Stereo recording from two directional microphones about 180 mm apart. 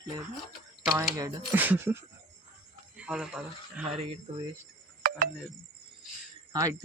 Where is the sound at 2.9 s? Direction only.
5° right (ahead or behind).